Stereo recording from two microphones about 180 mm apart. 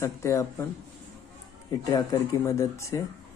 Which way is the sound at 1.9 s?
20° left (ahead or behind).